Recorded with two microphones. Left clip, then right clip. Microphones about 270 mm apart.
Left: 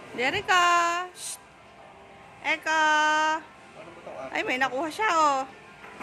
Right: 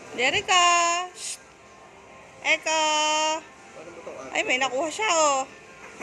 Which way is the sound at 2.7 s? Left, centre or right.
Centre.